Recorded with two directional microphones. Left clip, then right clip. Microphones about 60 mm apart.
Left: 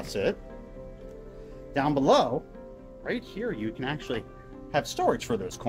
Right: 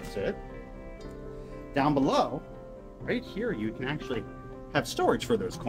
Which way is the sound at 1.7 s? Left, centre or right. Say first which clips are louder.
Left 3 dB; left.